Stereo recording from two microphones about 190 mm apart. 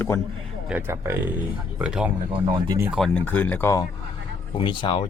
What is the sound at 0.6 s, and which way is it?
A man's voice, 10° right (ahead or behind).